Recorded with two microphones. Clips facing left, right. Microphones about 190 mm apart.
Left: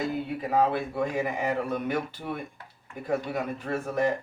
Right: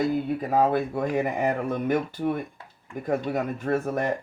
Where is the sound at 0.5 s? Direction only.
45° right (ahead or behind).